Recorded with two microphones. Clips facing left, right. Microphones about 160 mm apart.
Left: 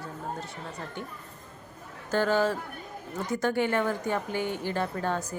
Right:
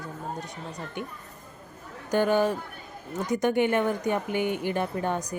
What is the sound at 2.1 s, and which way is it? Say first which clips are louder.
A woman's voice: right 2 dB; 15° right (ahead or behind).